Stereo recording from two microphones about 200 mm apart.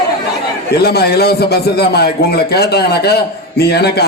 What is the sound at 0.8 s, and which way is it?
A man's voice, 50° left (ahead or behind).